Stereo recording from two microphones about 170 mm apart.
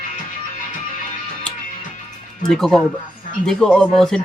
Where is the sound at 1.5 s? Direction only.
5° left (ahead or behind).